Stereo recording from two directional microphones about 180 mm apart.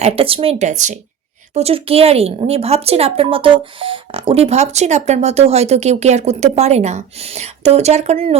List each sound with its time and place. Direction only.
0.0 s a woman's voice: 30° right (ahead or behind)